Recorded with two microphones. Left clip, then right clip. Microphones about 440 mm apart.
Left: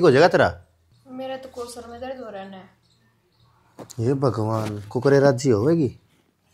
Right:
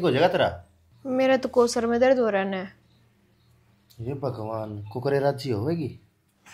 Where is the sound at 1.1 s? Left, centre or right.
Right.